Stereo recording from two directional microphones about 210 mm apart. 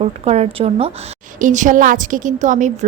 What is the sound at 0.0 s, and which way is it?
A woman's voice, 30° right (ahead or behind).